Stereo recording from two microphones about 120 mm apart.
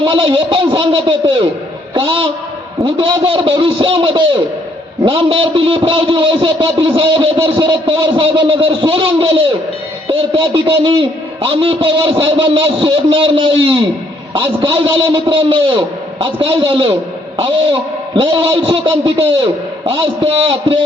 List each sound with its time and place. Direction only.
0.0 s a man's voice: 45° right (ahead or behind)